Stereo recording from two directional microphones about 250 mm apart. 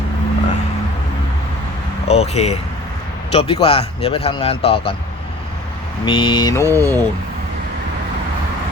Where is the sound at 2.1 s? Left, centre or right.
Left.